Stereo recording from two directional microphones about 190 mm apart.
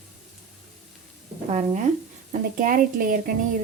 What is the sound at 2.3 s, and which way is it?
Speech, 45° right (ahead or behind).